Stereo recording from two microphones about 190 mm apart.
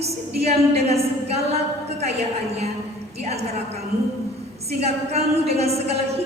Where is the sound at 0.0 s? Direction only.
35° right (ahead or behind).